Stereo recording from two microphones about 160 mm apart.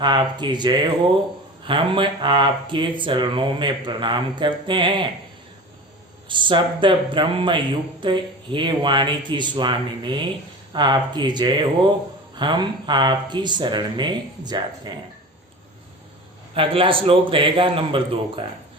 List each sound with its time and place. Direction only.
0.0 s speech: 30° right (ahead or behind)
6.2 s speech: 30° right (ahead or behind)
16.6 s speech: 35° right (ahead or behind)